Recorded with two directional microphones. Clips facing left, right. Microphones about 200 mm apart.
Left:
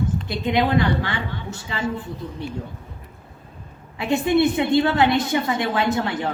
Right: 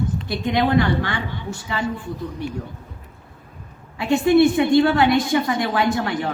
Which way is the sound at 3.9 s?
20° left (ahead or behind).